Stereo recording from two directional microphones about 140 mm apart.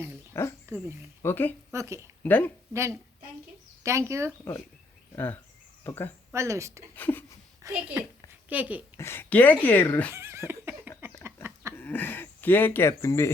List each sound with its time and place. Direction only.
0.3 s speech: 20° left (ahead or behind)
1.7 s speech: 20° right (ahead or behind)
2.2 s speech: 15° left (ahead or behind)
2.7 s speech: 20° right (ahead or behind)
5.1 s speech: 15° left (ahead or behind)
6.3 s speech: 20° right (ahead or behind)
6.9 s speech: 15° left (ahead or behind)
7.7 s a child's voice: 15° right (ahead or behind)
9.0 s speech: 15° left (ahead or behind)
10.1 s a sound: 20° right (ahead or behind)
11.8 s speech: 15° left (ahead or behind)